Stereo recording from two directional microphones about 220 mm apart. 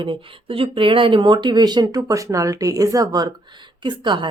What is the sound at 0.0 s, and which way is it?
Speech, 25° right (ahead or behind).